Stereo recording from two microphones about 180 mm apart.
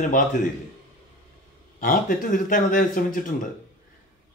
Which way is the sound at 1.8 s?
50° left (ahead or behind).